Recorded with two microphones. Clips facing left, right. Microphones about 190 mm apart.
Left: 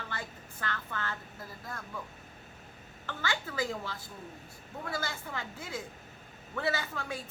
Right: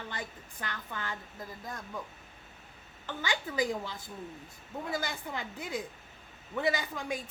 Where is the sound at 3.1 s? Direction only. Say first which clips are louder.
Right 1 dB; 15° right (ahead or behind).